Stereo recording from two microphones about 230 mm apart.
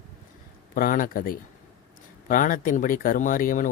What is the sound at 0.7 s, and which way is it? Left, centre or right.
Speech, left.